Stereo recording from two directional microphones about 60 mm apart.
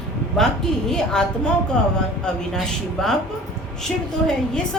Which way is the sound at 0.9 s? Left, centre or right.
Centre.